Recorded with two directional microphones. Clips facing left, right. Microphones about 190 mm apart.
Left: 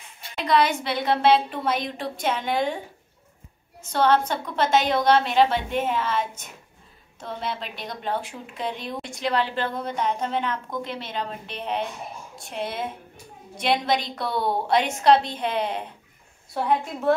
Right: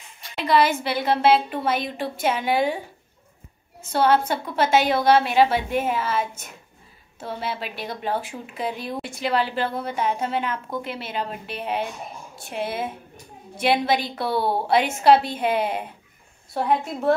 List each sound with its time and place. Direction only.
0.4 s speech: 5° right (ahead or behind)
3.8 s a woman's voice: 5° right (ahead or behind)